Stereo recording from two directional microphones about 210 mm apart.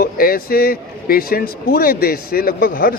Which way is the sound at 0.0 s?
45° left (ahead or behind).